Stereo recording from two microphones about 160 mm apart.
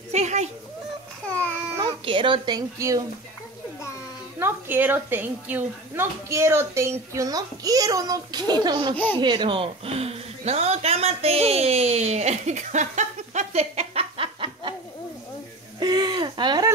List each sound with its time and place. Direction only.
0.1 s a sound: 45° right (ahead or behind)
1.3 s babbling: 10° left (ahead or behind)
1.8 s a child's voice: 30° right (ahead or behind)
4.4 s a woman's voice: 15° right (ahead or behind)
8.9 s speech: 10° left (ahead or behind)
9.2 s a woman's voice: 30° right (ahead or behind)
15.8 s a sound: 25° right (ahead or behind)